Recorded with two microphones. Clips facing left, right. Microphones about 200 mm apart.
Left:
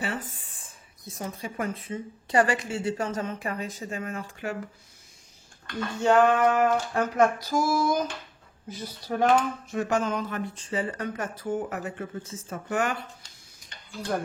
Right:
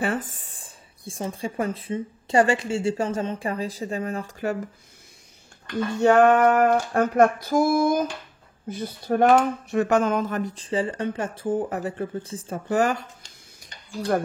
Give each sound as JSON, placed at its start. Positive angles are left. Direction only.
{"t": 0.0, "sound": "speech", "side_deg": -45}
{"t": 5.9, "sound": "a sound", "side_deg": -60}
{"t": 8.6, "sound": "speech", "side_deg": -55}
{"t": 14.1, "sound": "speech", "side_deg": -70}